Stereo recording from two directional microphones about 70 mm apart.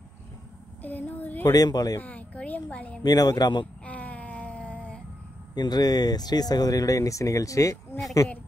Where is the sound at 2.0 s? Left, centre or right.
Left.